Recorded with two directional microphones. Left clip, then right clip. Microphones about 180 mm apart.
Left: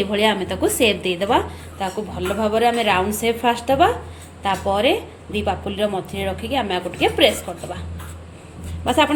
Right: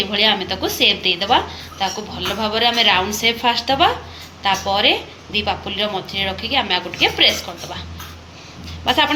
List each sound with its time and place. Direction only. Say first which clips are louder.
0.0 s a woman's voice: right 2 dB; 50° left (ahead or behind)
8.8 s speech: right 1 dB; 40° left (ahead or behind)